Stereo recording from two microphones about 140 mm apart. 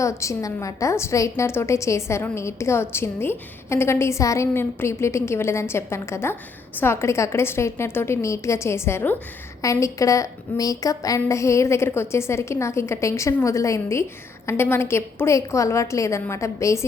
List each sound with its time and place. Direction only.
0.0 s a woman's voice: 20° left (ahead or behind)